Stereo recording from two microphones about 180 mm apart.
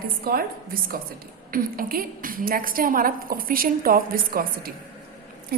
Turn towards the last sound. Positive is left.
turn(degrees=-55)  # may be behind; listen again after turning